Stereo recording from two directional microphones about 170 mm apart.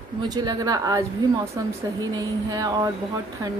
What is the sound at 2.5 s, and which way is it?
Speech, 20° right (ahead or behind).